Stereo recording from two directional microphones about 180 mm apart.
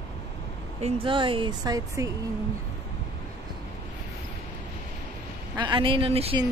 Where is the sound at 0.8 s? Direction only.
30° right (ahead or behind).